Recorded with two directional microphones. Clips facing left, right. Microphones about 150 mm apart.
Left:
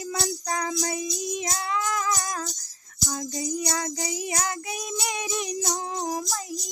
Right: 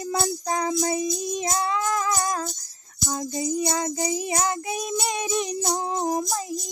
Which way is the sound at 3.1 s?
25° right (ahead or behind).